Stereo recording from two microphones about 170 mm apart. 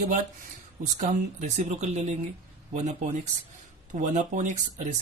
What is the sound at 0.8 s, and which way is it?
Speech, 45° right (ahead or behind).